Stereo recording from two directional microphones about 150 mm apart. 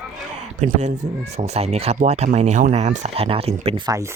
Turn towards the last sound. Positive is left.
turn(degrees=-20)  # may be behind; listen again after turning